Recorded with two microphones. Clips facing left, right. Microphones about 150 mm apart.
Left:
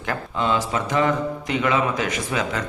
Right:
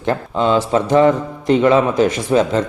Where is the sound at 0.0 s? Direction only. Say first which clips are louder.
Right 7 dB; 30° right (ahead or behind).